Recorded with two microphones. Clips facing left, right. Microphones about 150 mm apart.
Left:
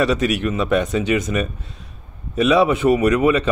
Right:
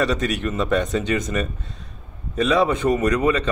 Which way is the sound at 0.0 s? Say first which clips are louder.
Left 3 dB; 5° left (ahead or behind).